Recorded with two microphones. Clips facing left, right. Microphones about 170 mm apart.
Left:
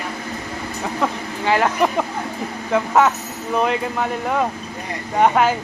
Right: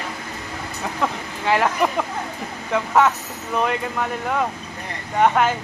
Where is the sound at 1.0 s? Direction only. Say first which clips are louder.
Left 2 dB; centre (ahead or behind).